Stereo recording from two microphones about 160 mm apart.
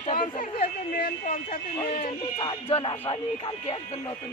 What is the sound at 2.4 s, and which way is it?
Speech, 30° left (ahead or behind).